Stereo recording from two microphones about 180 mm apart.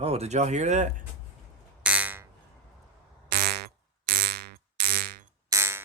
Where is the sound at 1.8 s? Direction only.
5° right (ahead or behind).